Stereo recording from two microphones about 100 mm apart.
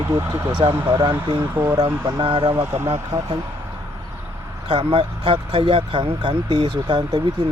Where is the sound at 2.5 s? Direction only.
30° right (ahead or behind).